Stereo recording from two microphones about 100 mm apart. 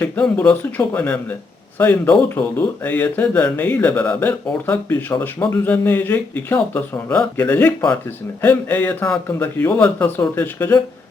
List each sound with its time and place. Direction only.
0.0 s speech: 15° left (ahead or behind)